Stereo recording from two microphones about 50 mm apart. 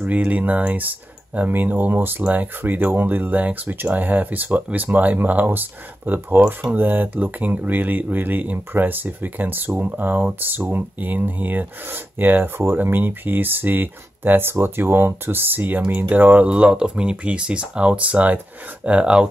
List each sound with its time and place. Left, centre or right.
0.0 s speech: right
16.4 s speech: right